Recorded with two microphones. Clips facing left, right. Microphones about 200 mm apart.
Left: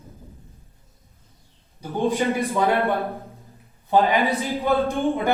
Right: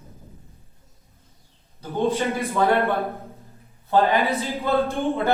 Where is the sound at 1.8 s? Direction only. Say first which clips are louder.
Even; 15° left (ahead or behind).